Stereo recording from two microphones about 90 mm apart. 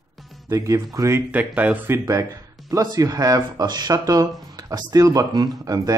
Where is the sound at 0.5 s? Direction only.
40° right (ahead or behind).